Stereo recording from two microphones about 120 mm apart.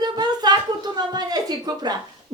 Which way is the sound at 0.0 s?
35° right (ahead or behind).